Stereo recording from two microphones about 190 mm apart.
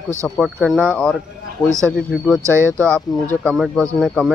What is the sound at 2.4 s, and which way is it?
Speech, 15° right (ahead or behind).